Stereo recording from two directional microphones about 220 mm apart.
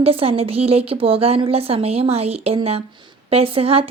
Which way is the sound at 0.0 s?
25° right (ahead or behind).